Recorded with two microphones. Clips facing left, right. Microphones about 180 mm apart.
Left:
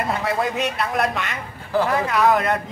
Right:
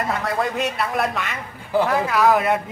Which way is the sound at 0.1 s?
Centre (ahead or behind).